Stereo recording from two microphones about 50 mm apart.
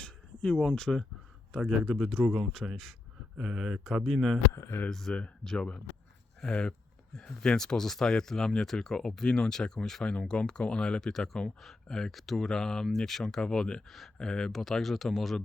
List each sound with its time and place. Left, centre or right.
0.0 s a sound: centre
0.8 s speech: centre
1.9 s speech: centre
4.5 s speech: left
4.9 s speech: centre
5.1 s speech: centre